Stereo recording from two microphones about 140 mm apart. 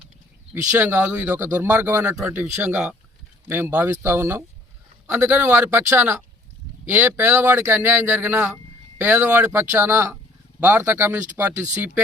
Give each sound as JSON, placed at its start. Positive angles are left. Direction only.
{"t": 0.8, "sound": "speech", "side_deg": -20}